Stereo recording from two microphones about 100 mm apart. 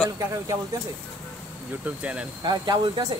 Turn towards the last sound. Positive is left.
turn(degrees=-50)  # may be behind; listen again after turning